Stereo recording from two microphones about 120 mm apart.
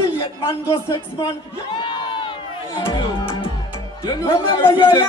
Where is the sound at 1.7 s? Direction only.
45° left (ahead or behind).